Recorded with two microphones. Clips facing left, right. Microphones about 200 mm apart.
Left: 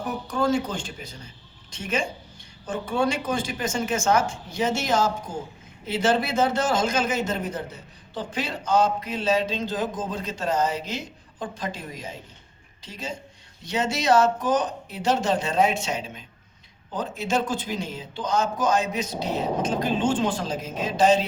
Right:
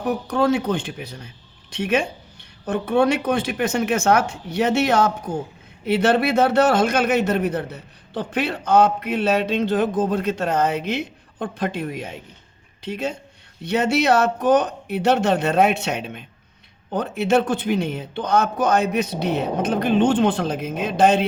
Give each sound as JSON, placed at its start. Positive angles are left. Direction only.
{"t": 0.3, "sound": "a man's voice", "side_deg": -60}